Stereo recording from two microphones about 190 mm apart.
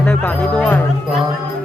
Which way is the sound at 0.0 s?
5° left (ahead or behind).